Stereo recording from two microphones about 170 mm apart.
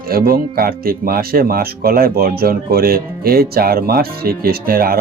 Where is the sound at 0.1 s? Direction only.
60° right (ahead or behind).